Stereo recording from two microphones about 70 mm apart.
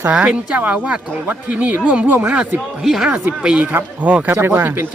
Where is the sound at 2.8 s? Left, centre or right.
Centre.